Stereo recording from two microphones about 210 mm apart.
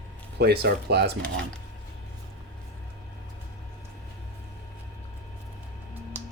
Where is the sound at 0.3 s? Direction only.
50° right (ahead or behind).